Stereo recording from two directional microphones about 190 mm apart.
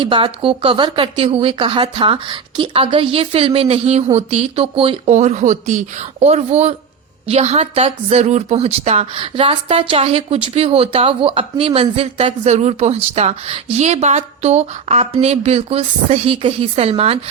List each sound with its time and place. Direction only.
0.0 s speech: 30° right (ahead or behind)